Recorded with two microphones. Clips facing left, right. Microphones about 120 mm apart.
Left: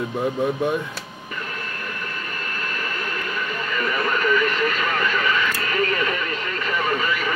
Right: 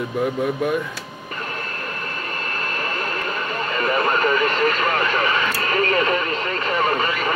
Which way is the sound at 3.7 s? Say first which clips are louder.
Right 4 dB; 40° right (ahead or behind).